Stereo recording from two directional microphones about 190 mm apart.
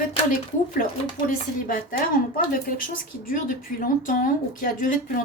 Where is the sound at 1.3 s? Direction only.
45° left (ahead or behind).